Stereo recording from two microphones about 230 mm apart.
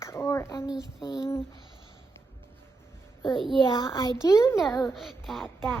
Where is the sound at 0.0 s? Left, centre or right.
Centre.